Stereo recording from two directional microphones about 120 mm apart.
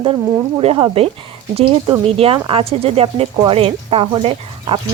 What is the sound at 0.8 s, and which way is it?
Speech, 55° right (ahead or behind).